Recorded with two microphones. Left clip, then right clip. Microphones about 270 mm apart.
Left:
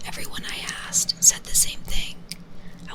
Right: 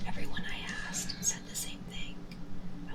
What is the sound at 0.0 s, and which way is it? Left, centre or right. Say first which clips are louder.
Whispering: left 7 dB; left.